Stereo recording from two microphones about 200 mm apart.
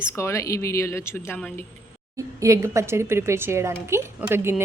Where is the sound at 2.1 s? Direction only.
15° right (ahead or behind).